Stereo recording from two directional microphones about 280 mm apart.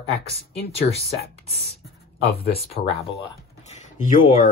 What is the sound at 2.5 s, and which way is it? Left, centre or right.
Speech, left.